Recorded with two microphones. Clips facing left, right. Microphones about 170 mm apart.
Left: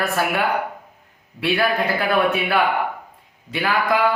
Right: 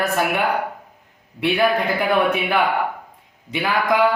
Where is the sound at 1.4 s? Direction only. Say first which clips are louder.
Right 2 dB; 20° right (ahead or behind).